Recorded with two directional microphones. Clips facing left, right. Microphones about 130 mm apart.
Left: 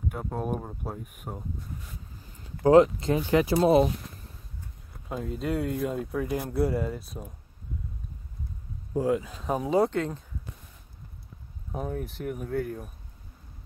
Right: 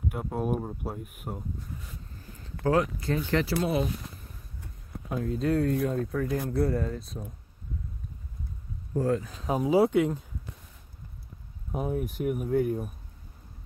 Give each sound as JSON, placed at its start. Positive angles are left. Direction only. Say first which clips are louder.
{"t": 0.1, "sound": "speech", "louder": "right 2 dB", "side_deg": -5}
{"t": 2.6, "sound": "speech", "louder": "left 8 dB", "side_deg": 20}
{"t": 5.2, "sound": "speech", "louder": "right 4 dB", "side_deg": 5}
{"t": 8.9, "sound": "speech", "louder": "left 1 dB", "side_deg": 15}
{"t": 9.5, "sound": "speech", "louder": "right 1 dB", "side_deg": -5}
{"t": 11.7, "sound": "speech", "louder": "right 3 dB", "side_deg": -10}